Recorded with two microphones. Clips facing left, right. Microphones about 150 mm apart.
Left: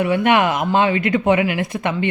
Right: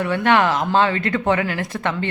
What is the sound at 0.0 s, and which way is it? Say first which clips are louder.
Speech: left 2 dB; 15° left (ahead or behind).